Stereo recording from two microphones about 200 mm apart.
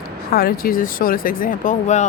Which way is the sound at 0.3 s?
50° left (ahead or behind).